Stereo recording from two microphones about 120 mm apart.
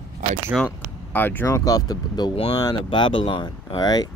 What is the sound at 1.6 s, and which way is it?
Speech, 30° left (ahead or behind).